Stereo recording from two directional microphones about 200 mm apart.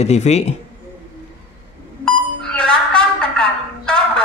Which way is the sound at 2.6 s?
5° left (ahead or behind).